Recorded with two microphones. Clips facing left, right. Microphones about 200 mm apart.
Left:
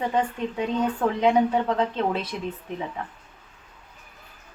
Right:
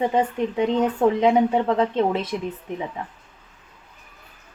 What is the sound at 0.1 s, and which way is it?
A woman's voice, 25° right (ahead or behind).